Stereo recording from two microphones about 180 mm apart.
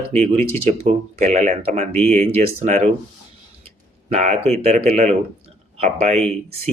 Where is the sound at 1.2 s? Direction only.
40° right (ahead or behind).